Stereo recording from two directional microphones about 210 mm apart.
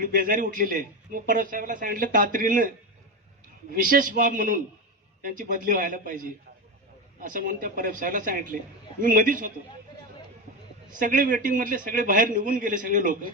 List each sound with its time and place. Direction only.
0.0 s speech: 40° right (ahead or behind)
10.9 s speech: 40° right (ahead or behind)